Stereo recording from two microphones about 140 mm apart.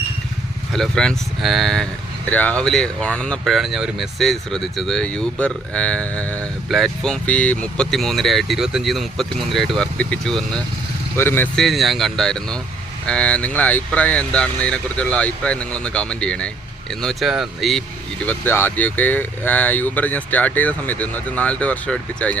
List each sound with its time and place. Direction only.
0.7 s speech: 5° left (ahead or behind)
11.2 s speech: 15° left (ahead or behind)
11.5 s speech: centre (ahead or behind)
18.3 s speech: 15° left (ahead or behind)